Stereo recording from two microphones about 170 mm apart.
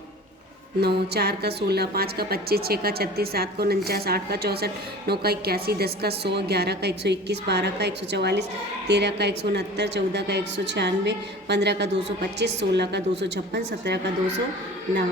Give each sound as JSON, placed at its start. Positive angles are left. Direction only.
{"t": 0.8, "sound": "a woman's voice", "side_deg": -70}